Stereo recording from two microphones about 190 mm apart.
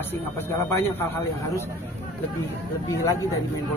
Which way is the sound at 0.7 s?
10° left (ahead or behind).